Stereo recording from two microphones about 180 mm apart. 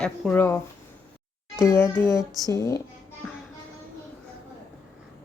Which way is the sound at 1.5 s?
15° left (ahead or behind).